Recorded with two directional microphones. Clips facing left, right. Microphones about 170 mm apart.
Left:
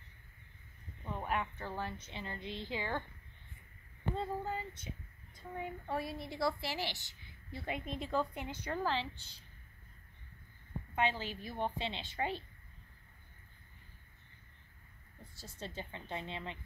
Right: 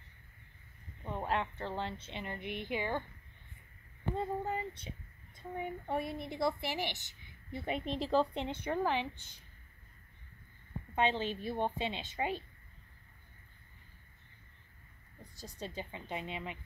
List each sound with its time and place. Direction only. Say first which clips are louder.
1.0 s a woman's voice: right 2 dB; 30° right (ahead or behind)
4.1 s speech: right 2 dB; 20° right (ahead or behind)
11.0 s speech: right 3 dB; 25° right (ahead or behind)
15.3 s a woman's voice: right 3 dB; 15° right (ahead or behind)